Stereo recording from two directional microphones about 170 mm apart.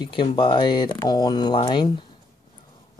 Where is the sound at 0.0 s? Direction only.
30° left (ahead or behind).